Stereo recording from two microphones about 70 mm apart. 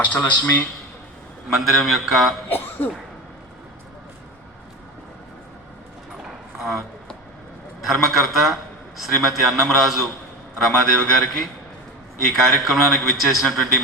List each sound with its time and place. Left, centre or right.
0.0 s a man's voice: left
1.5 s a man's voice: centre
2.5 s a sound: left
6.6 s a sound: centre
7.9 s a man's voice: centre
10.7 s a man's voice: centre